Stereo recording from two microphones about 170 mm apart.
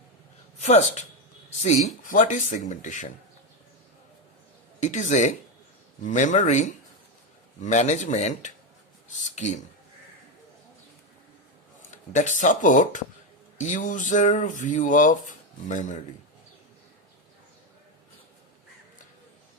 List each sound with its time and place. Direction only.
0.6 s speech: 40° left (ahead or behind)
2.0 s speech: 45° left (ahead or behind)
4.8 s speech: 45° left (ahead or behind)
11.9 s speech: 45° left (ahead or behind)